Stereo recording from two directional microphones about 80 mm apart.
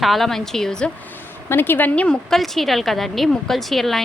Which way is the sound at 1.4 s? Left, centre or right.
Left.